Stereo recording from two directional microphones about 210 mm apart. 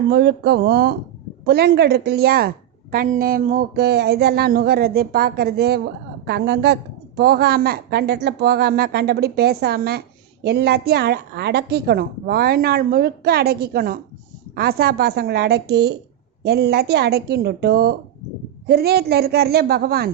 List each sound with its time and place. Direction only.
0.1 s a woman's voice: 55° right (ahead or behind)